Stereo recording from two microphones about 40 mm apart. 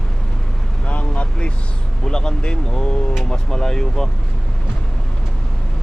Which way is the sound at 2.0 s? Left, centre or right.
Centre.